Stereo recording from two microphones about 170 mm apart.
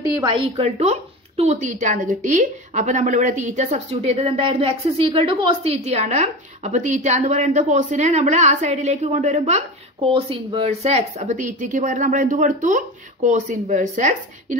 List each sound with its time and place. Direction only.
0.3 s a woman's voice: 35° right (ahead or behind)